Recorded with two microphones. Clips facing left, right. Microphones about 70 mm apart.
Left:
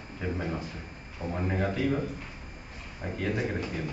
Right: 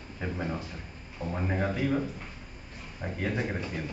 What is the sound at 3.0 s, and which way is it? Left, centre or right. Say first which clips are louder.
Speech: left 1 dB; centre.